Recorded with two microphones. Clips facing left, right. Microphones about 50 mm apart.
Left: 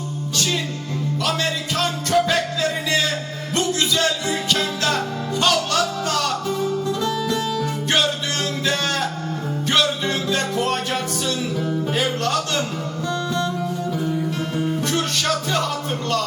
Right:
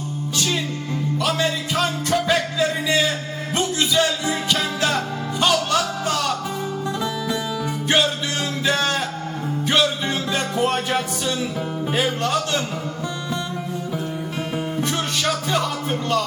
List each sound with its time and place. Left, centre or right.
0.3 s music: centre
8.6 s music: centre
14.6 s music: centre